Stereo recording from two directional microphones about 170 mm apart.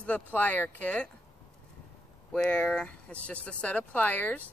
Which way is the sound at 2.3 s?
5° left (ahead or behind).